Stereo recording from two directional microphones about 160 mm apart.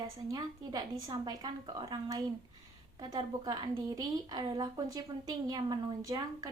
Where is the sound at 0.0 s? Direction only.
25° right (ahead or behind).